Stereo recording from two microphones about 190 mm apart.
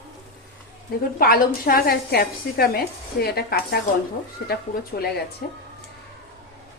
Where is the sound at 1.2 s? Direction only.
50° left (ahead or behind).